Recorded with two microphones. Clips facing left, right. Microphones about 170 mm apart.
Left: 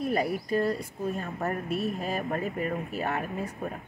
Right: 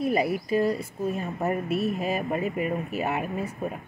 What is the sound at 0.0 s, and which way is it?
Speech, 10° right (ahead or behind).